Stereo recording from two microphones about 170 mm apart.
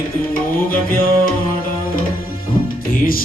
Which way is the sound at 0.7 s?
55° left (ahead or behind).